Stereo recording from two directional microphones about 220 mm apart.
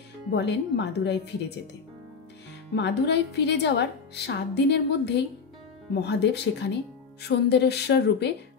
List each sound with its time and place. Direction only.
0.3 s speech: 50° left (ahead or behind)
2.7 s speech: 50° left (ahead or behind)